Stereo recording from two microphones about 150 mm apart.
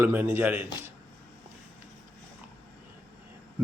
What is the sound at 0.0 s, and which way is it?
Speech, 15° right (ahead or behind).